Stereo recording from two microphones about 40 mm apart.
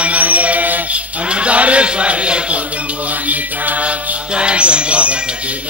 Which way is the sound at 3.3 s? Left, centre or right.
Right.